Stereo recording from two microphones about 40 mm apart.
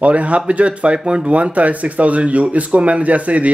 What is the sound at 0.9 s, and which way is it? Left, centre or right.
Speech, right.